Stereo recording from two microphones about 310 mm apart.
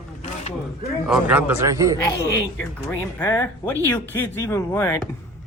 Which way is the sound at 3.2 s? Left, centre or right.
Centre.